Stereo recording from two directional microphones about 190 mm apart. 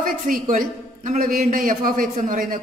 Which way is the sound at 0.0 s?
45° right (ahead or behind).